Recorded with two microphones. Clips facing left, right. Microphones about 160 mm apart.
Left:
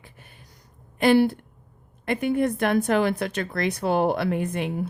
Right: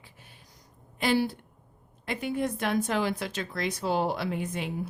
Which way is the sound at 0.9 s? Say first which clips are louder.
Left 8 dB; 60° left (ahead or behind).